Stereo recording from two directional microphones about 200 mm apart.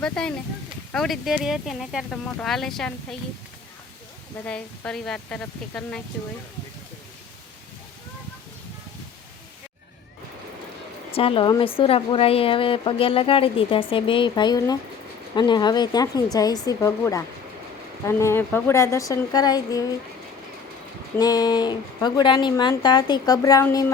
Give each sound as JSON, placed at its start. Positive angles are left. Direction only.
{"t": 0.0, "sound": "speech", "side_deg": 5}
{"t": 4.4, "sound": "speech", "side_deg": 5}
{"t": 11.1, "sound": "a woman's voice", "side_deg": 25}
{"t": 21.2, "sound": "a woman's voice", "side_deg": 20}